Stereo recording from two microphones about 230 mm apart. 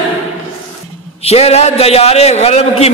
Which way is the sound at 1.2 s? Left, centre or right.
Left.